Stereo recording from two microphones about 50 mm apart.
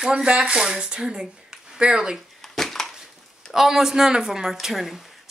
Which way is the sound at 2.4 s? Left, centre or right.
Centre.